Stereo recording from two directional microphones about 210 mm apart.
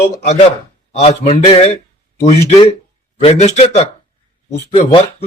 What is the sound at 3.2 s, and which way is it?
A man's voice, 30° left (ahead or behind).